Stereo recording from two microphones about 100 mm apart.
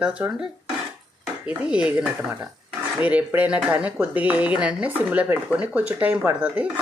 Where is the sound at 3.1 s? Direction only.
15° right (ahead or behind).